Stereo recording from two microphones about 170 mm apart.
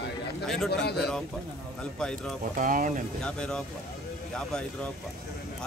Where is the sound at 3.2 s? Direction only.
5° left (ahead or behind).